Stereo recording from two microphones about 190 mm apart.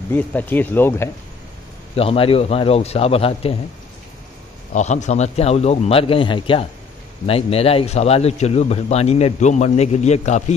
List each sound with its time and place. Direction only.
0.1 s speech: 10° left (ahead or behind)
2.0 s a man's voice: 30° left (ahead or behind)
4.7 s a man's voice: 40° left (ahead or behind)